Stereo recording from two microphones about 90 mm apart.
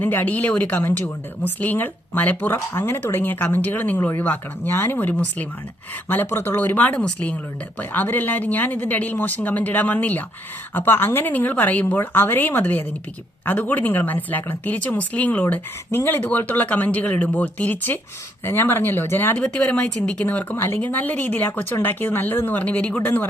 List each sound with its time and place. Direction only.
0.0 s a woman's voice: 20° left (ahead or behind)
19.4 s a woman's voice: 15° left (ahead or behind)